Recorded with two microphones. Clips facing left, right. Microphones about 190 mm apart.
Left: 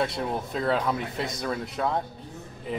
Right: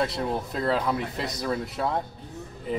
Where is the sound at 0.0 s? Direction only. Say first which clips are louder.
Right 1 dB; centre (ahead or behind).